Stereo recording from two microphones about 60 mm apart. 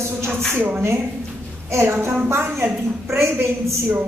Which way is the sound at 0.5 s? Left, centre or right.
Right.